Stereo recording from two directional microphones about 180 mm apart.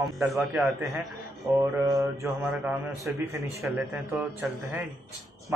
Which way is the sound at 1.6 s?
20° right (ahead or behind).